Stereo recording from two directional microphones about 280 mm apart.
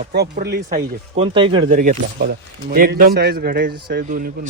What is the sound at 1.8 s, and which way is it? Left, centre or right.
Speech, right.